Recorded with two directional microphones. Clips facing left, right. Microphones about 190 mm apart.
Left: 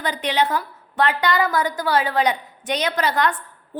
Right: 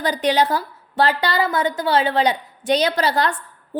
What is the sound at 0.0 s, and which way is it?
A woman's voice, 40° right (ahead or behind).